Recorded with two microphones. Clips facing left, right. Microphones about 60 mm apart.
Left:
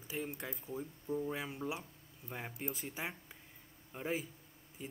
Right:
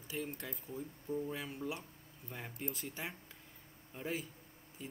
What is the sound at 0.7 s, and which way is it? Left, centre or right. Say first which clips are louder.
Speech: left 1 dB; left.